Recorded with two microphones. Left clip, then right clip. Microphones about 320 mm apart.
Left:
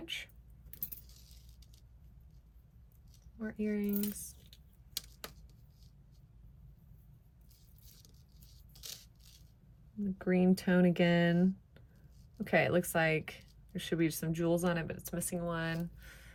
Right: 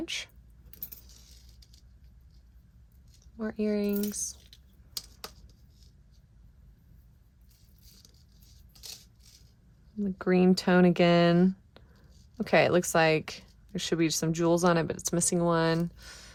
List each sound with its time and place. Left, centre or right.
0.0 s keys jangling: centre
3.3 s speech: centre
4.1 s squish: centre
10.0 s speech: centre